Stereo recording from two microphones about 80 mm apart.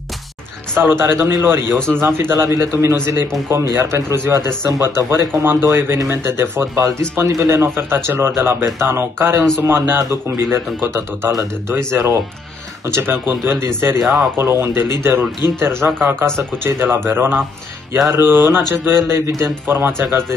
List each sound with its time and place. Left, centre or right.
0.7 s a man's voice: right
13.9 s speech: centre
14.3 s a man's voice: right